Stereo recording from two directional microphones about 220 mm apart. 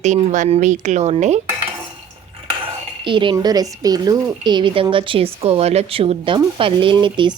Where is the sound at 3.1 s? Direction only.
20° right (ahead or behind).